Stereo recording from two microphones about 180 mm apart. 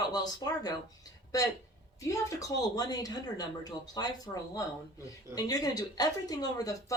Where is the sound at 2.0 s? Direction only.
15° left (ahead or behind).